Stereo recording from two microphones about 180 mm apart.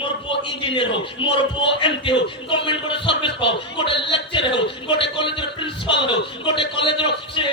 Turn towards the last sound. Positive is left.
turn(degrees=30)  # may be behind; listen again after turning